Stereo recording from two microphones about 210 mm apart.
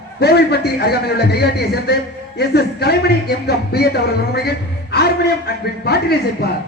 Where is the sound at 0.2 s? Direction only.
50° left (ahead or behind).